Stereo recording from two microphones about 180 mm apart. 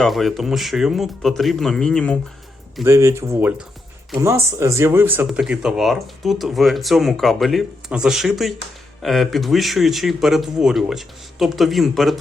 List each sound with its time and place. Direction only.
0.0 s speech: centre (ahead or behind)
2.8 s speech: 15° right (ahead or behind); by 12.1 s centre (ahead or behind)